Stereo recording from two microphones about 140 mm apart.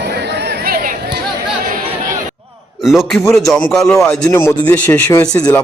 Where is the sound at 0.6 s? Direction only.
90° right.